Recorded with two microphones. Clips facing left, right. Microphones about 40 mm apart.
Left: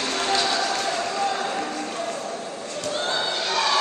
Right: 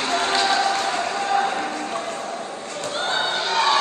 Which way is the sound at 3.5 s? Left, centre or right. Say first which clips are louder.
Right 3 dB; right.